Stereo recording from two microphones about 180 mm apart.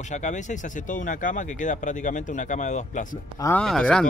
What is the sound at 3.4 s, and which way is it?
Speech, 5° left (ahead or behind).